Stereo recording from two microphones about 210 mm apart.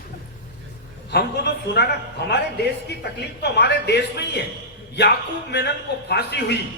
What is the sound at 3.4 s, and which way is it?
A man's voice, 55° left (ahead or behind).